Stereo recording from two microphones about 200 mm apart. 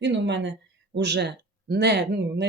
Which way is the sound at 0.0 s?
60° right (ahead or behind).